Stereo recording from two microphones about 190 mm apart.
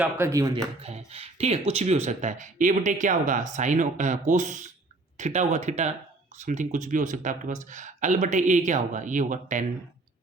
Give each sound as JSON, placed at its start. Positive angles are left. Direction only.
{"t": 0.0, "sound": "speech", "side_deg": -15}
{"t": 0.8, "sound": "speech", "side_deg": -35}